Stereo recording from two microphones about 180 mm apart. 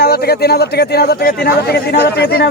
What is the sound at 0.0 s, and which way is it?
Speech, 60° left (ahead or behind).